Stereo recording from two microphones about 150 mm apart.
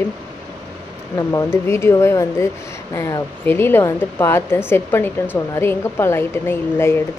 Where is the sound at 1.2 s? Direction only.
20° left (ahead or behind).